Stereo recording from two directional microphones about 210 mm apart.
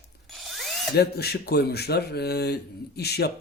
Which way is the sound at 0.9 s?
50° left (ahead or behind).